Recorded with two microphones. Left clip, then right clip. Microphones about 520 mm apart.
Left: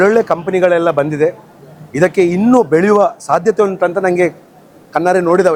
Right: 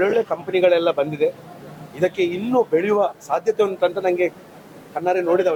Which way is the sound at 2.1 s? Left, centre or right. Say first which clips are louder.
Left 9 dB; left.